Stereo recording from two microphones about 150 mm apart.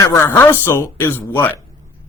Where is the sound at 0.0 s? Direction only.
20° left (ahead or behind).